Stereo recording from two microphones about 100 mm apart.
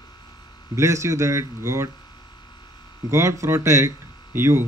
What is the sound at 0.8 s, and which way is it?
Speech, 30° right (ahead or behind).